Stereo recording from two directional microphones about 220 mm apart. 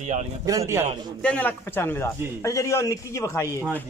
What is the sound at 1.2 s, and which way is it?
A man's voice, 5° left (ahead or behind).